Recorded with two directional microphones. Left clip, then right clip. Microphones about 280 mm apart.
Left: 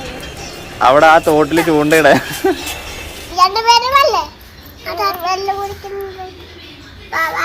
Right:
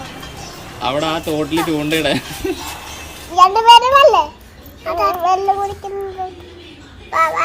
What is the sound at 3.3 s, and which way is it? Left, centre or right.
Speech, right.